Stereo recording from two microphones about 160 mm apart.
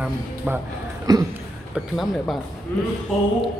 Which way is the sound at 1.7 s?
Centre (ahead or behind).